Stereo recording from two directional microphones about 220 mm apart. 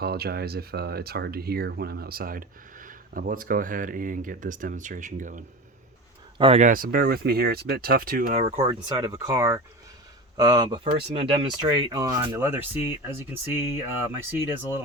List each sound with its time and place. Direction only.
0.0 s speech: 45° right (ahead or behind)
6.4 s speech: 30° right (ahead or behind); by 13.8 s 10° right (ahead or behind)